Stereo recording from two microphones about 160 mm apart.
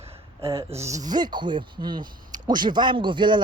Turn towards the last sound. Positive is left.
turn(degrees=-30)  # may be behind; listen again after turning